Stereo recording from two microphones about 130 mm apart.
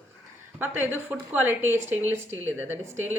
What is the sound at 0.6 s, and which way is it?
Speech, 15° right (ahead or behind).